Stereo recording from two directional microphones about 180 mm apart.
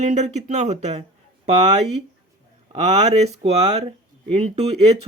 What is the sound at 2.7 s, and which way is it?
Speech, 40° right (ahead or behind).